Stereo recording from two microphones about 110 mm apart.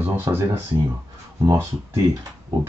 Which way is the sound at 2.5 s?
35° right (ahead or behind).